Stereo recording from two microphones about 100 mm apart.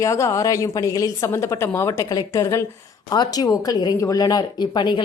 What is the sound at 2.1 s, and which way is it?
Speech, 45° left (ahead or behind).